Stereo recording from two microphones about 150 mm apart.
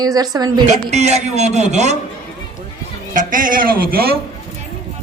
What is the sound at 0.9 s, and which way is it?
A man's voice, 45° right (ahead or behind).